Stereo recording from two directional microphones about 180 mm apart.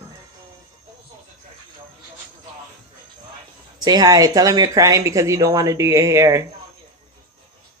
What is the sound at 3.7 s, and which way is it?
Speech, 20° right (ahead or behind).